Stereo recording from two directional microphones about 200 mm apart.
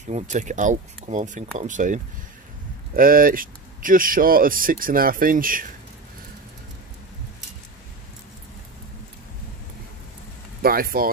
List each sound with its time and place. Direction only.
0.1 s speech: 35° right (ahead or behind)
3.0 s speech: 45° right (ahead or behind)
10.6 s speech: 50° right (ahead or behind)